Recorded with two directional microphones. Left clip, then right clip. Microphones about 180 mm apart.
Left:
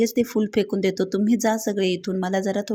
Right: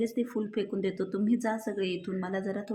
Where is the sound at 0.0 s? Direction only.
40° left (ahead or behind).